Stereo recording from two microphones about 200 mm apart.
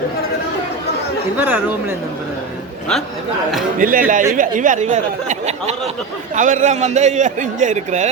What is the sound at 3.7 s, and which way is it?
A man's voice, 45° right (ahead or behind).